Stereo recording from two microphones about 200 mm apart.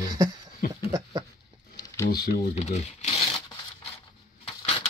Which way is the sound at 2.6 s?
35° left (ahead or behind).